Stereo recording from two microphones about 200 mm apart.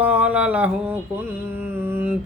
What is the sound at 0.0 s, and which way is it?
Mantra, 5° right (ahead or behind).